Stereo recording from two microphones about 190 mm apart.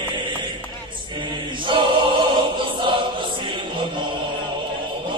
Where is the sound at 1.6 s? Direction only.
25° right (ahead or behind).